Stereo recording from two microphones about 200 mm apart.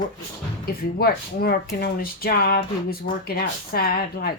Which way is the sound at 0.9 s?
50° left (ahead or behind).